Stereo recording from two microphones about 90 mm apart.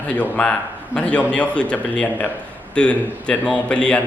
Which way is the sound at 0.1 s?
15° left (ahead or behind).